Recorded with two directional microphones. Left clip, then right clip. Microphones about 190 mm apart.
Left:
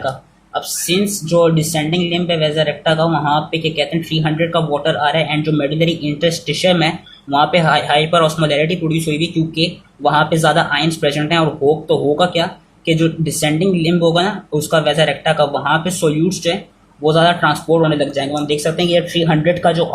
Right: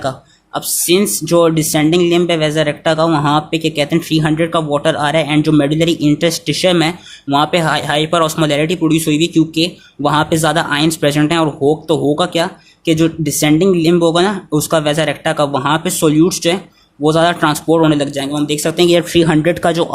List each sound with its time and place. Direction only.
0.5 s speech: 45° right (ahead or behind)